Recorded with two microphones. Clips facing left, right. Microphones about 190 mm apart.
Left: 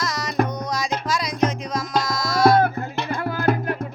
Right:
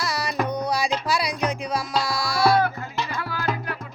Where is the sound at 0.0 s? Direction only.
10° right (ahead or behind).